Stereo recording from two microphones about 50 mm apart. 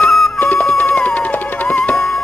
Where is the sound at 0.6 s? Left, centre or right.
Left.